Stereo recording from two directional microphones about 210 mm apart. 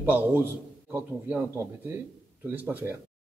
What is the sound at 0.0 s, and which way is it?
A man's voice, 10° right (ahead or behind).